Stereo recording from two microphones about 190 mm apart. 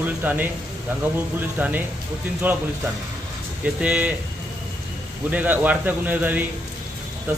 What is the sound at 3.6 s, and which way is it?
Speech, 5° right (ahead or behind).